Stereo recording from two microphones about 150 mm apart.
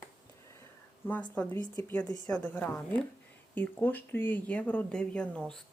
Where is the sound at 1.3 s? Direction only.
10° left (ahead or behind).